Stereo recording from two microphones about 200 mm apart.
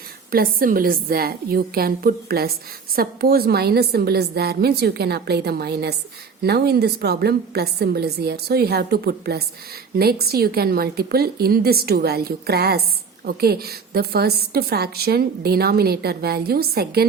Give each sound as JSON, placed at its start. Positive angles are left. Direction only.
{"t": 0.3, "sound": "a woman's voice", "side_deg": -45}